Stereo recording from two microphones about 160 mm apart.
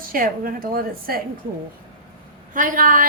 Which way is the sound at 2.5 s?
55° right (ahead or behind).